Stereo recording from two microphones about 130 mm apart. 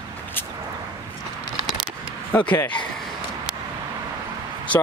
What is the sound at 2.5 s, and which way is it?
Speech, 10° left (ahead or behind).